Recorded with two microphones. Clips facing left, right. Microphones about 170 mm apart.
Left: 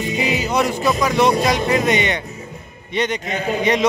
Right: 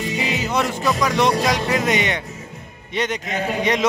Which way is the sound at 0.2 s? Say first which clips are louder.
Left 4 dB; 15° left (ahead or behind).